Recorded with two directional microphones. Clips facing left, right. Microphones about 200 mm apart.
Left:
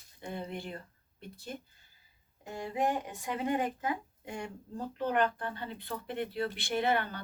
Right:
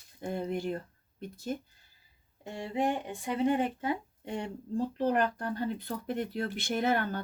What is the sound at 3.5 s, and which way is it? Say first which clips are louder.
Speech: right 2 dB; 25° right (ahead or behind).